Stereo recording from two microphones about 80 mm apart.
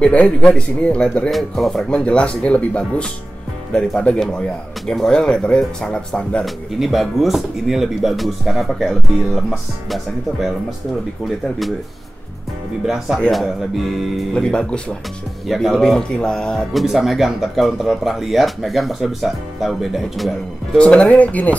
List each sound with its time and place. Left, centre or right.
0.0 s speech: centre
1.3 s speech: centre
1.9 s speech: centre
6.4 s speech: centre
11.2 s speech: centre
12.8 s speech: centre
14.3 s speech: centre
15.4 s speech: centre
16.7 s speech: centre
20.7 s speech: centre